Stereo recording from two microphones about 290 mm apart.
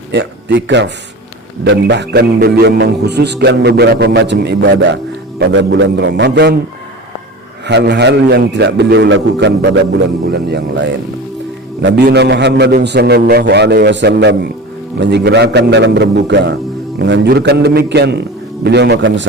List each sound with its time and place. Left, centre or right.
0.1 s a man's voice: right
7.6 s a man's voice: right